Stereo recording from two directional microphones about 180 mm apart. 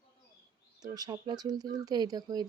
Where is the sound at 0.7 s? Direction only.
20° right (ahead or behind).